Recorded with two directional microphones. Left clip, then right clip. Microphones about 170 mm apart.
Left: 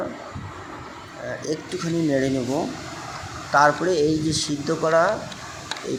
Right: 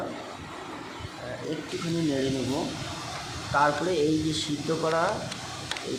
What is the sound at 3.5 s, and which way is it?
Speech, 30° left (ahead or behind).